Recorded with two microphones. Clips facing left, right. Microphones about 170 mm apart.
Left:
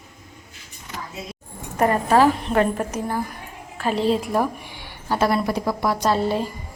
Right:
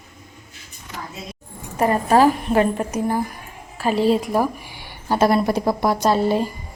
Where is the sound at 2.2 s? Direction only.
10° right (ahead or behind).